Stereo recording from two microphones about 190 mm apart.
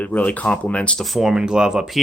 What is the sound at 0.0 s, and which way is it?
Speech, 10° left (ahead or behind).